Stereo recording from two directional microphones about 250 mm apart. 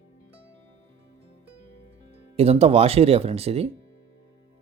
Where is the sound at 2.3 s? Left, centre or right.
Right.